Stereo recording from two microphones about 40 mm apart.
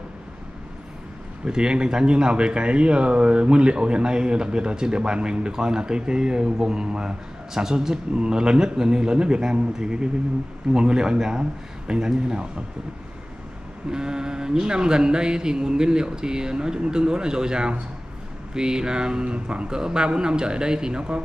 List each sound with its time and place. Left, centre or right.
1.4 s a man's voice: right
13.8 s speech: centre